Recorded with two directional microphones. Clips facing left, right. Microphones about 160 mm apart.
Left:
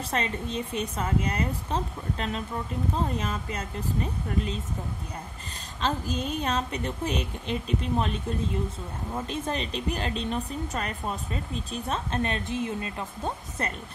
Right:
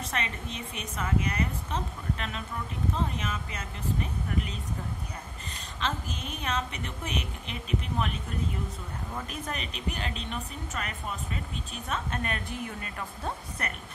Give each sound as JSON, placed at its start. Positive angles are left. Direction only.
{"t": 0.1, "sound": "a woman's voice", "side_deg": 30}
{"t": 5.8, "sound": "a woman's voice", "side_deg": 35}